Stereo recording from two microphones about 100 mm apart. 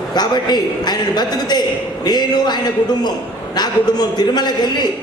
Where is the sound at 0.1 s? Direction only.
45° left (ahead or behind).